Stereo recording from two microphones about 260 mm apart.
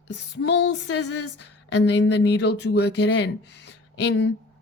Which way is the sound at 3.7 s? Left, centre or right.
Left.